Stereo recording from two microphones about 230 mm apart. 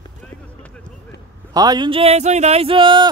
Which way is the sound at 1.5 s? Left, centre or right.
Centre.